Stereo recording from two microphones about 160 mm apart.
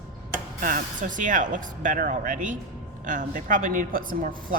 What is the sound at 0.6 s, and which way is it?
A woman's voice, 60° right (ahead or behind).